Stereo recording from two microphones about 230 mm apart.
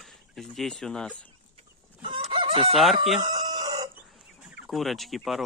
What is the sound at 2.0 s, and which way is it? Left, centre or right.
Chicken, right.